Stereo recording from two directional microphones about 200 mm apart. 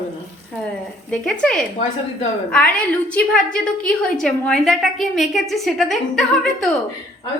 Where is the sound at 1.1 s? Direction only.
5° left (ahead or behind).